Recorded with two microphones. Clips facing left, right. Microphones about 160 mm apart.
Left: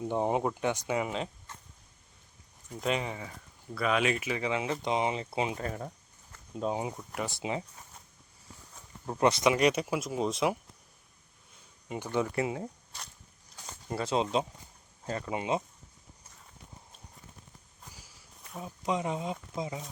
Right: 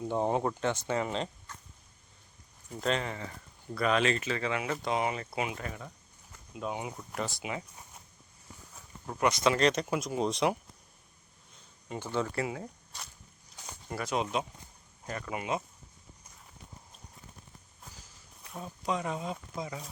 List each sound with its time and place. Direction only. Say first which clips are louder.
0.0 s speech: even; 15° left (ahead or behind)
2.8 s speech: even; 10° left (ahead or behind)
9.0 s speech: left 3 dB; 30° left (ahead or behind)
9.4 s speech: left 1 dB; 15° left (ahead or behind)
12.1 s speech: left 2 dB; 20° left (ahead or behind)
13.8 s speech: left 3 dB; 25° left (ahead or behind)
18.0 s walk: even; 5° left (ahead or behind)
18.9 s speech: left 2 dB; 20° left (ahead or behind)